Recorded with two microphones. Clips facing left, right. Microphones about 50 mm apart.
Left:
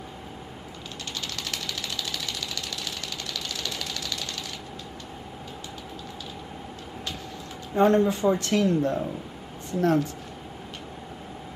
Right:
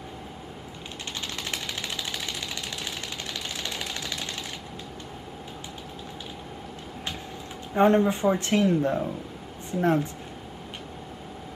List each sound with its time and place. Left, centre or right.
1.3 s engine: right
3.3 s a sound: right
7.7 s speech: right